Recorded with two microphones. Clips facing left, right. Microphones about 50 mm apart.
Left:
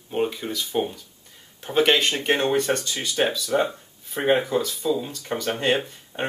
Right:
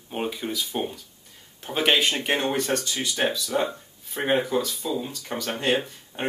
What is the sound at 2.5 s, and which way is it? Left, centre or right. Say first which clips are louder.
Speech: left 3 dB; left.